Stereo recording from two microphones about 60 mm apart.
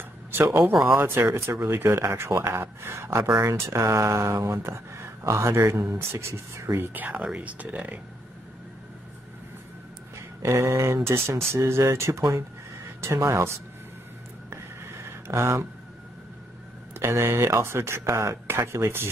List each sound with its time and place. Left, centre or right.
0.5 s speech: right
3.3 s speech: right
3.8 s speech: right
6.9 s speech: right
10.1 s speech: right
14.5 s a sound: right
16.9 s speech: right